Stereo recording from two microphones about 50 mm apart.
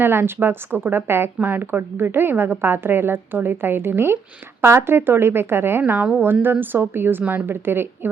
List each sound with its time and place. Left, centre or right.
0.0 s a woman's voice: right
1.4 s a woman's voice: right
5.8 s a woman's voice: right